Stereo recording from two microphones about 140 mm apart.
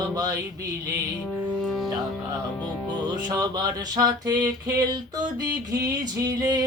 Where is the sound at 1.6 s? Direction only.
Centre (ahead or behind).